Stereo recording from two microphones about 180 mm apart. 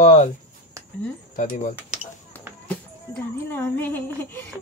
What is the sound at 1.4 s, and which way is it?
Speech, 45° left (ahead or behind).